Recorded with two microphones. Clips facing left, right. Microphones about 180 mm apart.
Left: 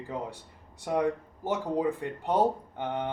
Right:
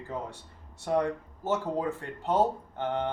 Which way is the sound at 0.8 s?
15° left (ahead or behind).